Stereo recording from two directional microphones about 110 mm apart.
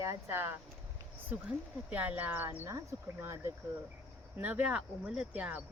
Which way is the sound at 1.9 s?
15° right (ahead or behind).